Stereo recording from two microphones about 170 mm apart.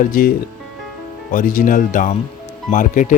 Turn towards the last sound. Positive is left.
turn(degrees=50)  # may be behind; listen again after turning